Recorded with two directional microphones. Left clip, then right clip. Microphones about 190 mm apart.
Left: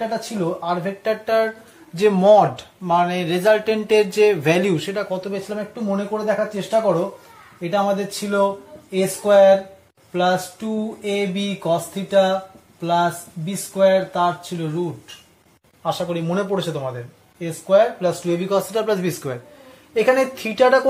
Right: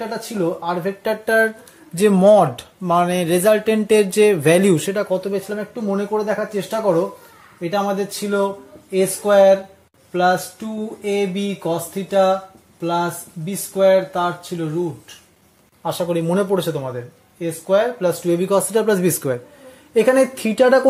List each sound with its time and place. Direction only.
0.1 s speech: 45° right (ahead or behind)
15.8 s speech: 50° right (ahead or behind)